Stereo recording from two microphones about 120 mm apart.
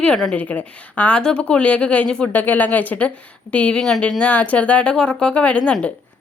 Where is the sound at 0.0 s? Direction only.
5° left (ahead or behind).